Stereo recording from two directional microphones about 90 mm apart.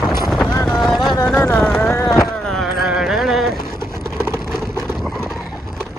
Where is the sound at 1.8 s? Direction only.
35° left (ahead or behind).